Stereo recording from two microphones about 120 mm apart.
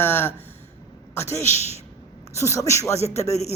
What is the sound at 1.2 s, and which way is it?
Speech, 70° left (ahead or behind).